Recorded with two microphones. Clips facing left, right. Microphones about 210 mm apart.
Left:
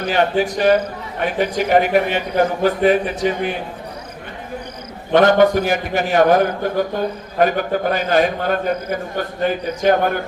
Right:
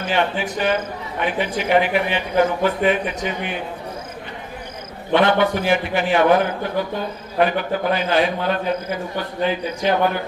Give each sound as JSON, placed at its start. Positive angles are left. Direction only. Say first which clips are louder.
{"t": 0.0, "sound": "a man's voice", "louder": "left 4 dB", "side_deg": 40}
{"t": 5.1, "sound": "a man's voice", "louder": "left 5 dB", "side_deg": 45}